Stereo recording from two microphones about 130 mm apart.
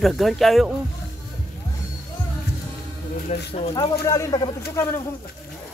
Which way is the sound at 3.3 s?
60° left (ahead or behind).